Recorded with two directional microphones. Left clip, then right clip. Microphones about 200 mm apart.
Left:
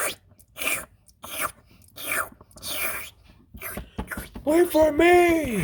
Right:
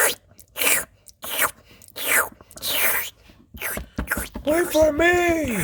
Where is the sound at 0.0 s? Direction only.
30° right (ahead or behind).